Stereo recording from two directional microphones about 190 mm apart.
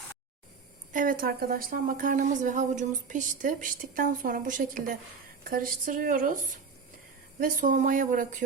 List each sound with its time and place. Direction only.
0.9 s a woman's voice: 45° right (ahead or behind)